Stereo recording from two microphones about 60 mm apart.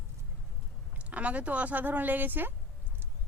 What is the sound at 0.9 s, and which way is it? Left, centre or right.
Speech, right.